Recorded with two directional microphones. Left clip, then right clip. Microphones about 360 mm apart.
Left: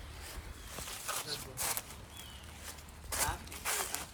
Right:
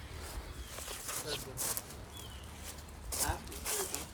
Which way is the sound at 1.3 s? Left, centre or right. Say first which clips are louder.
Even; centre.